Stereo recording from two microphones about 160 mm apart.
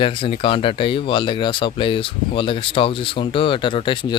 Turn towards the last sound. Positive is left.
turn(degrees=30)  # may be behind; listen again after turning